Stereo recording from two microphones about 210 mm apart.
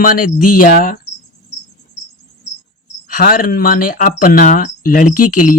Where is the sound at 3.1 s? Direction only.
40° left (ahead or behind).